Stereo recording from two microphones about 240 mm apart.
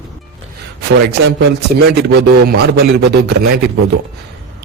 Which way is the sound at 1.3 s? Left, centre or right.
Right.